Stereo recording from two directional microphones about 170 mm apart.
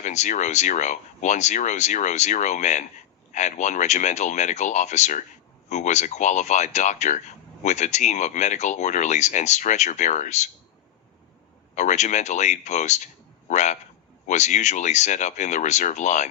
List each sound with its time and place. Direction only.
0.0 s speech: 45° left (ahead or behind)
11.7 s speech: 45° left (ahead or behind)